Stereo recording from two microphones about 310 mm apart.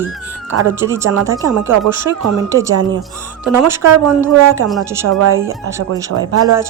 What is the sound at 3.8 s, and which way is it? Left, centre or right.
Speech, right.